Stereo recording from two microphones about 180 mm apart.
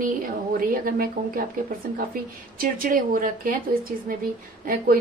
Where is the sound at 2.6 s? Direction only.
50° right (ahead or behind).